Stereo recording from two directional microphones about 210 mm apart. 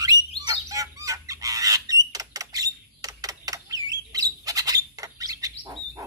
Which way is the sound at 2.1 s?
15° right (ahead or behind).